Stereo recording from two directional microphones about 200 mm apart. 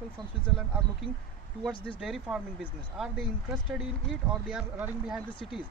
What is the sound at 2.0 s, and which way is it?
Speech, centre (ahead or behind).